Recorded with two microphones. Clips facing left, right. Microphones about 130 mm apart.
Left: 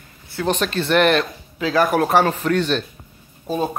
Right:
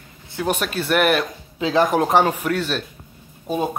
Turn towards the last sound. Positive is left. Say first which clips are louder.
# even
turn(degrees=-15)  # may be behind; listen again after turning